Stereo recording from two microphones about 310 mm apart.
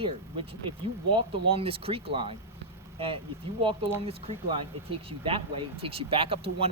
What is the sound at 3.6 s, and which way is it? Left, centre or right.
Speech, centre.